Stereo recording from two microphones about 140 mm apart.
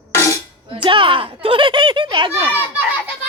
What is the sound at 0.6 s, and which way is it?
Speech, 35° right (ahead or behind).